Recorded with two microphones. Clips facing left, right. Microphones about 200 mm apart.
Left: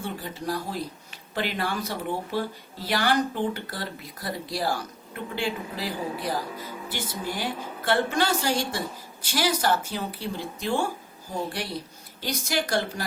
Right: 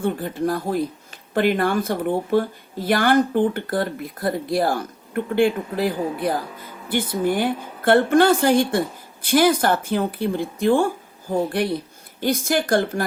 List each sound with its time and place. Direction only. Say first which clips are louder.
0.0 s a woman's voice: right 10 dB; 55° right (ahead or behind)